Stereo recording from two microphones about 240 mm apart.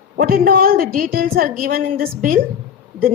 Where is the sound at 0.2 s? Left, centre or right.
Right.